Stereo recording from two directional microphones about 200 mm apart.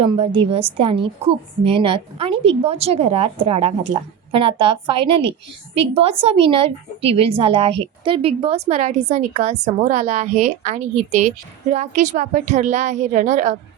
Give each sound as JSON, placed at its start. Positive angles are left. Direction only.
{"t": 0.0, "sound": "a woman's voice", "side_deg": -25}